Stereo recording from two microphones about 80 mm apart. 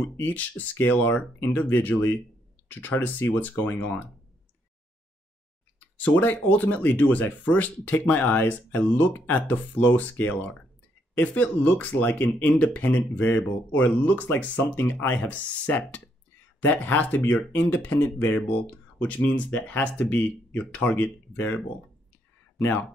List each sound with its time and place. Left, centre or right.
0.0 s speech: left
5.9 s speech: centre